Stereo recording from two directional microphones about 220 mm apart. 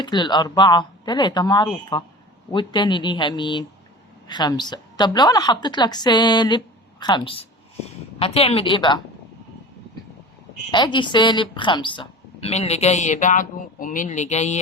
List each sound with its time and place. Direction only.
0.0 s a woman's voice: 20° left (ahead or behind)
10.7 s a woman's voice: 20° left (ahead or behind)